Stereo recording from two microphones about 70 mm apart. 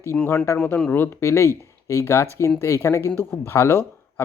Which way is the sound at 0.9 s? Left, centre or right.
Left.